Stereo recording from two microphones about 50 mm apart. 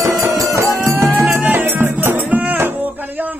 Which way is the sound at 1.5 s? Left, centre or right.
Right.